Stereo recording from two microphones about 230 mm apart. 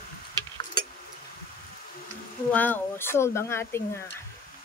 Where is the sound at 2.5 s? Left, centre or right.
Centre.